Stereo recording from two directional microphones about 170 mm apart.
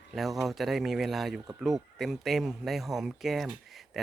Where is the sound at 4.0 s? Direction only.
Centre (ahead or behind).